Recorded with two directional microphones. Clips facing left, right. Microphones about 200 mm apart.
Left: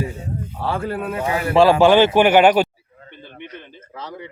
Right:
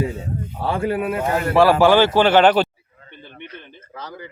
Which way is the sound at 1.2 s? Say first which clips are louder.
Left 2 dB; 5° left (ahead or behind).